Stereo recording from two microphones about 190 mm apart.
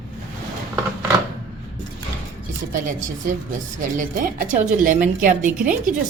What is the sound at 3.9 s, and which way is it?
A woman's voice, 45° right (ahead or behind).